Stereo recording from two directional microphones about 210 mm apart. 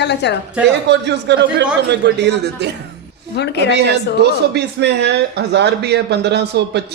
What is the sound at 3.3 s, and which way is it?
Speech, 55° left (ahead or behind).